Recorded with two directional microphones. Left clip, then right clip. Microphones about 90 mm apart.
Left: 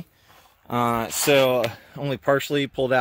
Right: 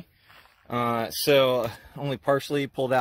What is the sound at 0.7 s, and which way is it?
Speech, 25° left (ahead or behind).